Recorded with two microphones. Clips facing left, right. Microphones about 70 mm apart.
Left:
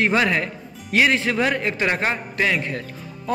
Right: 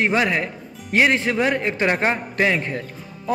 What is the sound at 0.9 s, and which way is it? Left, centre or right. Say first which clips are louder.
Speech: right 1 dB; right.